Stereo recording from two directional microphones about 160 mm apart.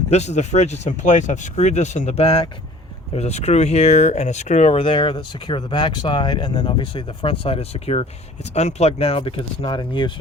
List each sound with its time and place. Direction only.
0.1 s speech: 45° left (ahead or behind)